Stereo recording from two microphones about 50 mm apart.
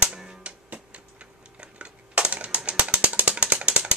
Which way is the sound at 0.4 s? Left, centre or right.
Right.